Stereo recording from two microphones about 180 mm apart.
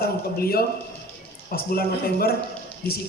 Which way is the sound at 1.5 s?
55° left (ahead or behind).